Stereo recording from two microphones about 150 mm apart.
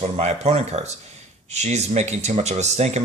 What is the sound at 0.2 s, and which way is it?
Speech, 45° right (ahead or behind).